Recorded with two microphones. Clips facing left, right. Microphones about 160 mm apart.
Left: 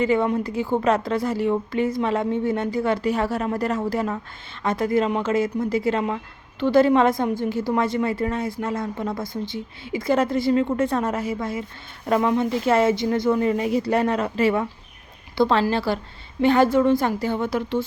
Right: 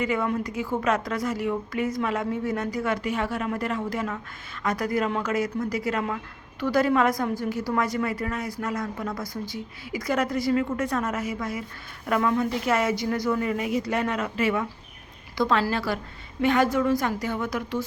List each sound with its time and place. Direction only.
0.0 s a woman's voice: 30° left (ahead or behind)